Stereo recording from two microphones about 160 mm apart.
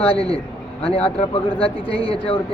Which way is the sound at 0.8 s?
35° left (ahead or behind).